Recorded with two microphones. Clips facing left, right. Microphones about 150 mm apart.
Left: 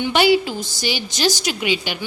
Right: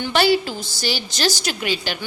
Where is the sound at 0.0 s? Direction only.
15° left (ahead or behind).